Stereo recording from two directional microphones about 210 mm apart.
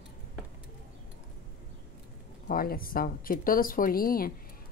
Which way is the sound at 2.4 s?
45° left (ahead or behind).